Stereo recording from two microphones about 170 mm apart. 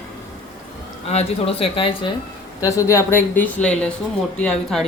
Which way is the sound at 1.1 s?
35° left (ahead or behind).